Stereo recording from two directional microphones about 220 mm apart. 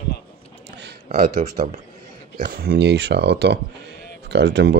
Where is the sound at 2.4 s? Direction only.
45° right (ahead or behind).